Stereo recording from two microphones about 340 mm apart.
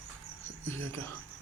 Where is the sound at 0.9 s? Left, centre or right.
Centre.